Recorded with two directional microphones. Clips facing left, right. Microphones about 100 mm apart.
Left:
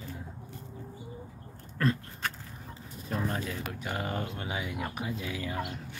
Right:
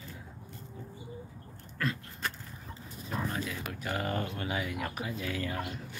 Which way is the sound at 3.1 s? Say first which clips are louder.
Left 2 dB; 40° left (ahead or behind).